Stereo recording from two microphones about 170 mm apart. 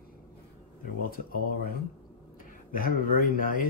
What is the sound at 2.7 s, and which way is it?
Speech, 55° left (ahead or behind).